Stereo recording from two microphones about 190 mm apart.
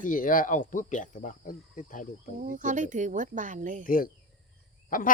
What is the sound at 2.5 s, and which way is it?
Speech, 40° right (ahead or behind).